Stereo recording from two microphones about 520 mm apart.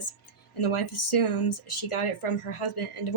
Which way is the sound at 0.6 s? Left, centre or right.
Left.